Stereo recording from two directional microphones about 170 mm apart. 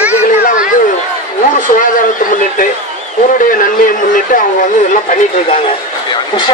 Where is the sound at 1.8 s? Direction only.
50° left (ahead or behind).